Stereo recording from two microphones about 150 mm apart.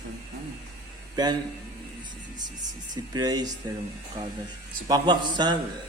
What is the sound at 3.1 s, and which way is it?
Speech, 25° right (ahead or behind).